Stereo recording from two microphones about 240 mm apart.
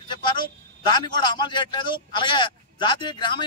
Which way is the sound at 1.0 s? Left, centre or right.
Centre.